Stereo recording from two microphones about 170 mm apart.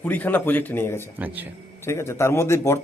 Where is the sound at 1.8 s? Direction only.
15° left (ahead or behind).